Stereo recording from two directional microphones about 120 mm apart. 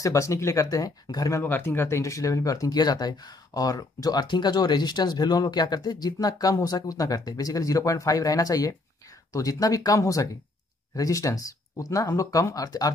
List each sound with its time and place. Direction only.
0.0 s speech: 25° left (ahead or behind)
1.4 s speech: 15° left (ahead or behind)